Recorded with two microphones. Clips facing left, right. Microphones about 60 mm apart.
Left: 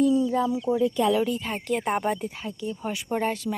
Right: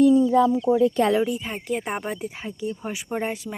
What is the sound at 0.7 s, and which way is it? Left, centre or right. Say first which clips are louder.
Speech: right 3 dB; right.